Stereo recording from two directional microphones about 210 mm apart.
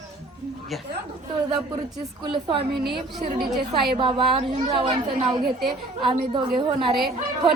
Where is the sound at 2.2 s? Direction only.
25° right (ahead or behind).